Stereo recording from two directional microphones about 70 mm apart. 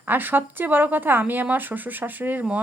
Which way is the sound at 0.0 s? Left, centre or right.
Right.